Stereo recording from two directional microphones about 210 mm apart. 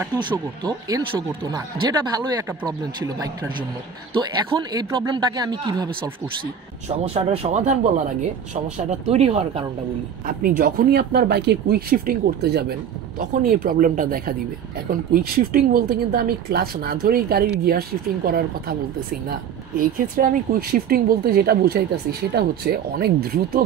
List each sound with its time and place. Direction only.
0.0 s speech: 20° right (ahead or behind)
4.7 s speech: 20° right (ahead or behind)
9.0 s speech: 30° right (ahead or behind)
10.2 s speech: 40° right (ahead or behind)
13.2 s speech: 40° right (ahead or behind)
19.8 s speech: 40° right (ahead or behind)